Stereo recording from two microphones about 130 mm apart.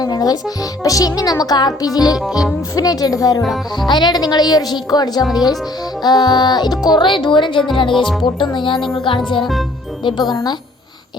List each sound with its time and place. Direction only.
0.0 s speech: 30° left (ahead or behind)
2.1 s speech: centre (ahead or behind)
2.7 s a woman's voice: 30° left (ahead or behind)